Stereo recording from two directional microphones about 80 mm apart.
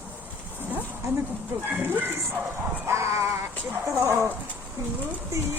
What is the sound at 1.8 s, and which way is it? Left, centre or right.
Speech, right.